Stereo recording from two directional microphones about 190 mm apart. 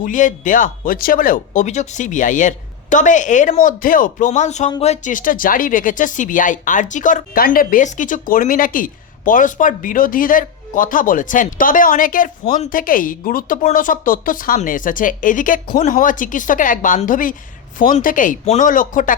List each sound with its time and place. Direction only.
0.0 s speech: 40° left (ahead or behind)